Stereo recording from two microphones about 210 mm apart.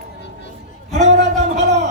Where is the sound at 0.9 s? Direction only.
35° right (ahead or behind).